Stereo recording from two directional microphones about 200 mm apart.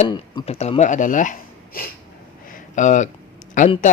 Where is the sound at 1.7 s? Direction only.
45° left (ahead or behind).